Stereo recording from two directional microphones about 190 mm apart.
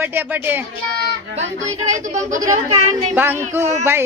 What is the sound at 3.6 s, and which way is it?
Speech, 35° right (ahead or behind).